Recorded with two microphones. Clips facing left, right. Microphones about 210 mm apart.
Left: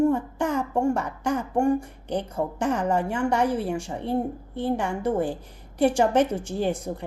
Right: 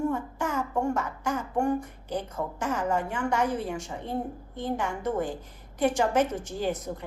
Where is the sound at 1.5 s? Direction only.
25° left (ahead or behind).